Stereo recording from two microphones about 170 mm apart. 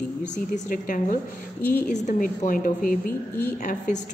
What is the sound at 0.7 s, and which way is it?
A woman's voice, 50° left (ahead or behind).